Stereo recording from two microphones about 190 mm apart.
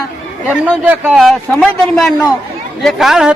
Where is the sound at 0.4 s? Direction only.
5° right (ahead or behind).